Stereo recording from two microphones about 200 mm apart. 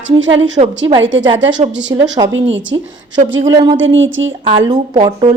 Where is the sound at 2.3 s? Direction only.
70° right (ahead or behind).